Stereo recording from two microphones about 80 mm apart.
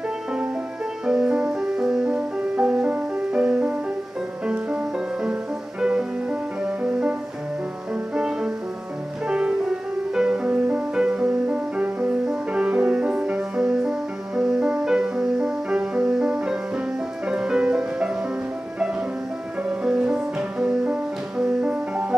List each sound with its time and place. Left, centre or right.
1.0 s music: centre
19.8 s music: centre